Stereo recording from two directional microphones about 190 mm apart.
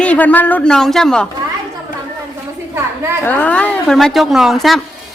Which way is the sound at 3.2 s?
10° left (ahead or behind).